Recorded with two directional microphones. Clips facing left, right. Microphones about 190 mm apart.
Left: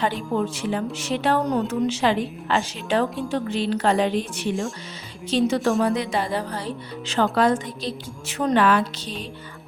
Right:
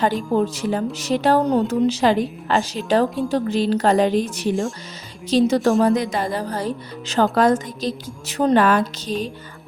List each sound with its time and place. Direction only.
0.3 s a woman's voice: 35° right (ahead or behind)